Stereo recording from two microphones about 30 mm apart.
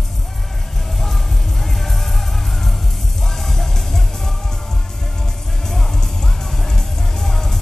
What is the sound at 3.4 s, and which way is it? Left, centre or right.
Music, centre.